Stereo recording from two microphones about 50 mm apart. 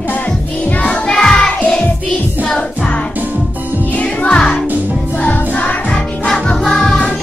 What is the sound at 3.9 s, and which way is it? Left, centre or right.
Music, left.